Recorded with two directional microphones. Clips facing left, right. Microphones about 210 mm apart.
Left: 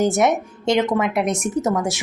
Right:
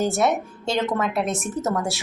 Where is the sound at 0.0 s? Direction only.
15° left (ahead or behind).